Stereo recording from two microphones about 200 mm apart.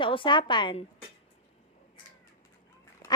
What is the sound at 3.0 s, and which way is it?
Duck, 15° left (ahead or behind).